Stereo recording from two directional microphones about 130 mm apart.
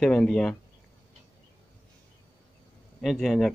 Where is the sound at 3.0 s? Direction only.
Centre (ahead or behind).